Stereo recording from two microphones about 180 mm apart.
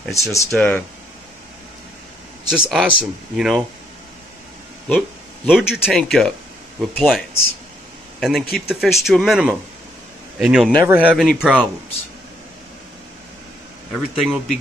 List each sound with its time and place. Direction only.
0.1 s speech: 15° left (ahead or behind)
2.5 s speech: 5° right (ahead or behind)
4.8 s speech: centre (ahead or behind)
14.2 s speech: centre (ahead or behind)